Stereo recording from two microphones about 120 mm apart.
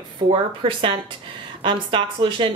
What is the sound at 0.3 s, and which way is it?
A woman's voice, 50° right (ahead or behind).